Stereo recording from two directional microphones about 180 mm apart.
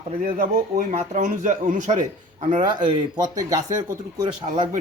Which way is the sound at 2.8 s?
20° right (ahead or behind).